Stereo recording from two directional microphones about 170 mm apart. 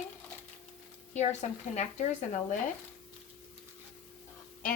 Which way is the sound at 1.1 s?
40° left (ahead or behind).